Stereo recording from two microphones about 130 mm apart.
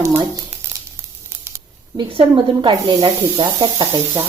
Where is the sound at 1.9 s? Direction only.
35° right (ahead or behind).